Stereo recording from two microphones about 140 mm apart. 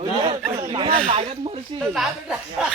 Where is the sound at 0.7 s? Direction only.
35° right (ahead or behind).